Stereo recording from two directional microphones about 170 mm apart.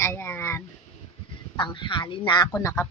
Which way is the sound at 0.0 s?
15° left (ahead or behind).